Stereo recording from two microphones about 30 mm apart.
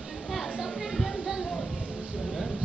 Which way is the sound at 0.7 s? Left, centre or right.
Centre.